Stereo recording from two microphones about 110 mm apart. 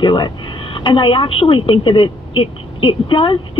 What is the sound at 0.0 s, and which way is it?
Speech, 45° left (ahead or behind).